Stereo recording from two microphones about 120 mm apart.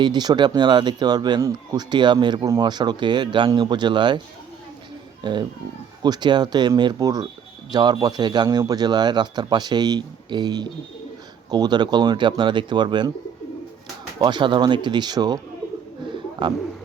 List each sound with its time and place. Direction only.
0.0 s a man's voice: 35° right (ahead or behind)
1.4 s speech: 25° right (ahead or behind)
1.9 s a man's voice: 40° right (ahead or behind)
5.2 s a man's voice: 40° right (ahead or behind)
14.2 s a man's voice: 40° right (ahead or behind)
16.4 s a man's voice: 40° right (ahead or behind)